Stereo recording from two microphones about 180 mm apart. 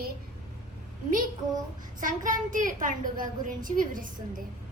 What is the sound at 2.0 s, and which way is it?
A child's voice, 45° right (ahead or behind).